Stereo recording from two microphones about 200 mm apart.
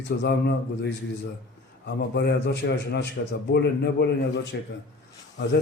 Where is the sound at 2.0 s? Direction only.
55° left (ahead or behind).